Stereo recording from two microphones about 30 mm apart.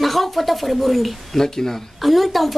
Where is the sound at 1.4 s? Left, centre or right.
Centre.